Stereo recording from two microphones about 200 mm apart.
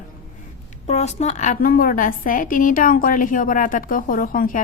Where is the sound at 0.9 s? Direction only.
35° left (ahead or behind).